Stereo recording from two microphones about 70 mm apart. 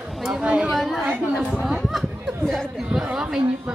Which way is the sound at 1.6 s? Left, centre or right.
Centre.